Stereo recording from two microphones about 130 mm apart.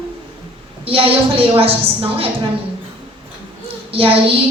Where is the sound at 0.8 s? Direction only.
45° right (ahead or behind).